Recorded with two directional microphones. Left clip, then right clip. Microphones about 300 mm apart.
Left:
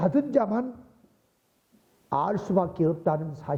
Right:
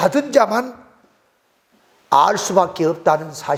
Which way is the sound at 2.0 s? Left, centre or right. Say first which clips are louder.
Right 13 dB; centre.